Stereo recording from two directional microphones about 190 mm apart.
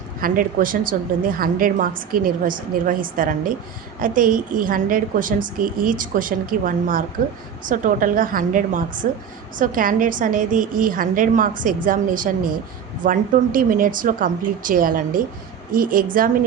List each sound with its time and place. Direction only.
0.2 s a woman's voice: 45° right (ahead or behind)